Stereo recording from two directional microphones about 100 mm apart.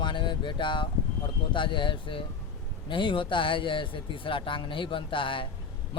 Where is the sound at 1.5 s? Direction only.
55° left (ahead or behind).